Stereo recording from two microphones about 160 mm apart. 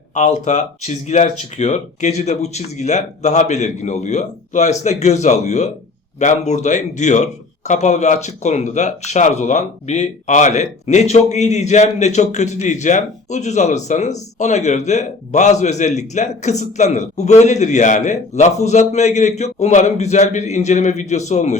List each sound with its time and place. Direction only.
0.1 s speech: 45° left (ahead or behind)